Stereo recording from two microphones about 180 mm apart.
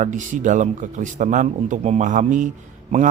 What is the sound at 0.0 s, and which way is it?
Speech, 45° right (ahead or behind).